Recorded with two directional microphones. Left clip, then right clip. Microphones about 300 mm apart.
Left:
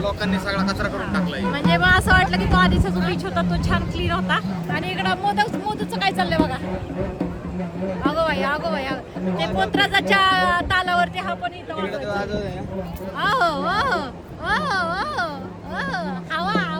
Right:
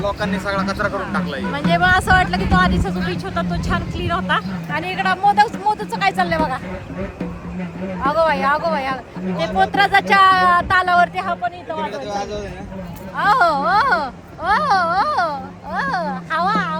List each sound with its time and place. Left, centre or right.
0.0 s speech: centre
1.5 s speech: centre
4.7 s speech: centre
8.0 s speech: centre
13.1 s speech: centre